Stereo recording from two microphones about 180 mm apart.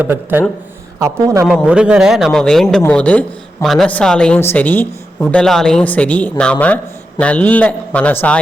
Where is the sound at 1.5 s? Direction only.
5° right (ahead or behind).